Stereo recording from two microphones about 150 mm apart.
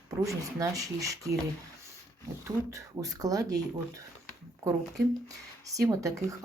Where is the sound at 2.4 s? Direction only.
20° right (ahead or behind).